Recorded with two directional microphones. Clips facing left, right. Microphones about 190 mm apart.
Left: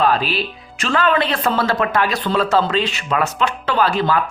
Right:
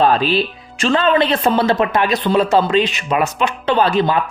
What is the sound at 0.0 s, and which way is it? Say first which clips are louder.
Music: right 3 dB; 25° right (ahead or behind).